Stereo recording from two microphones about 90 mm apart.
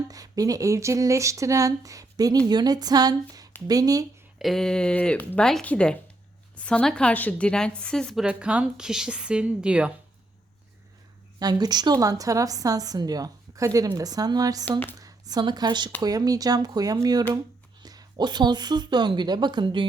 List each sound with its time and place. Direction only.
0.1 s a woman's voice: 40° right (ahead or behind)
4.4 s a woman's voice: centre (ahead or behind)
8.2 s a woman's voice: 15° right (ahead or behind)
11.3 s a woman's voice: 45° right (ahead or behind)
16.0 s a woman's voice: 45° right (ahead or behind); by 19.8 s 60° right (ahead or behind)